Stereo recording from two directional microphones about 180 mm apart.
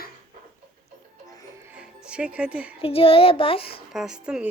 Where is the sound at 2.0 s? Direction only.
5° right (ahead or behind).